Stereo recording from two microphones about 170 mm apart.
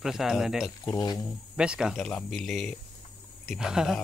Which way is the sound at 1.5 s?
5° right (ahead or behind).